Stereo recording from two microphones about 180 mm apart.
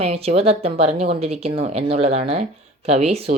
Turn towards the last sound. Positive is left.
turn(degrees=-35)  # may be behind; listen again after turning